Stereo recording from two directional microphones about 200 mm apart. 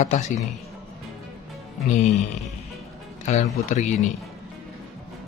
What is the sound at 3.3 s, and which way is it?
Speech, 35° left (ahead or behind).